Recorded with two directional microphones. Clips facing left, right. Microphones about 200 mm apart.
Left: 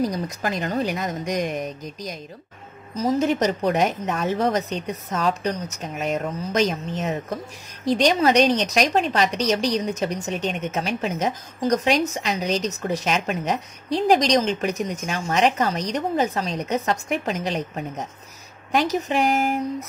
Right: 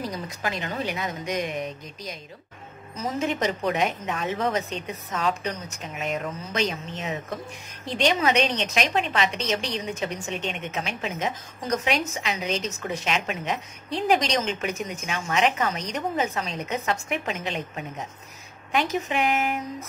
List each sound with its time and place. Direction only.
0.0 s a woman's voice: 45° left (ahead or behind)